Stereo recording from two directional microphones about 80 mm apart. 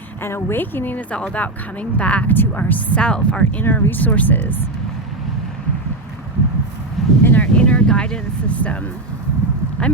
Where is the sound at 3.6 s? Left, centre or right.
Left.